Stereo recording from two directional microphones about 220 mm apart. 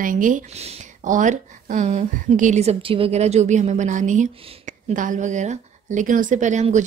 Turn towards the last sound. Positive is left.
turn(degrees=-35)  # may be behind; listen again after turning